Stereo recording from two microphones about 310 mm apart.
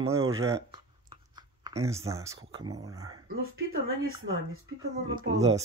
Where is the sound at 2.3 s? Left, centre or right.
Right.